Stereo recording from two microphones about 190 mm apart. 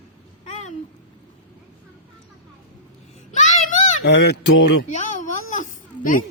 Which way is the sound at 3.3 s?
40° left (ahead or behind).